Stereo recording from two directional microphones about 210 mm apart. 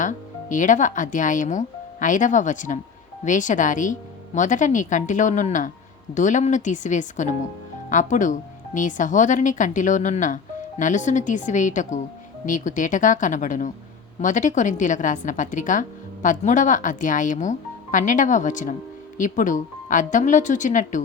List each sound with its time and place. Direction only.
0.0 s a woman's voice: 35° left (ahead or behind)